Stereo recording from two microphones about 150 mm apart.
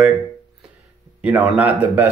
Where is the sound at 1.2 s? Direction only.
10° right (ahead or behind).